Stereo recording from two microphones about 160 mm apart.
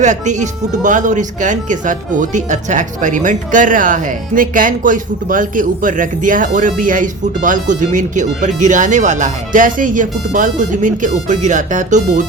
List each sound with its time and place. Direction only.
0.0 s speech: 50° right (ahead or behind)